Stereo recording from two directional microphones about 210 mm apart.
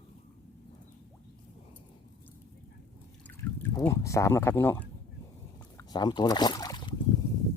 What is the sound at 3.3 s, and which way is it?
Pour, 15° left (ahead or behind).